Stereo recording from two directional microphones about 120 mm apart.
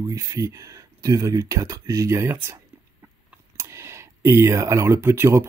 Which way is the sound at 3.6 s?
20° right (ahead or behind).